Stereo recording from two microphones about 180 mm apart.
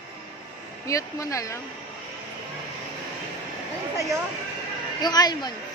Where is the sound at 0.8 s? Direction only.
15° left (ahead or behind).